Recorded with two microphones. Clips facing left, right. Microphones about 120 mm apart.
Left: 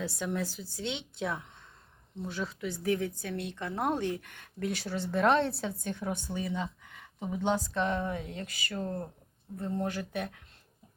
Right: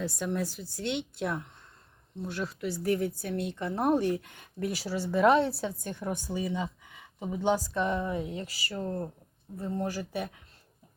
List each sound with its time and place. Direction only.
0.0 s a woman's voice: centre (ahead or behind)